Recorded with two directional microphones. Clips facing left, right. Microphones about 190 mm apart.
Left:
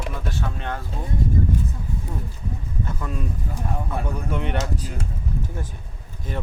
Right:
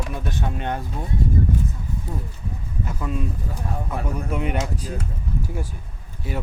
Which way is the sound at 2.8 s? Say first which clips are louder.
Right 2 dB; 10° right (ahead or behind).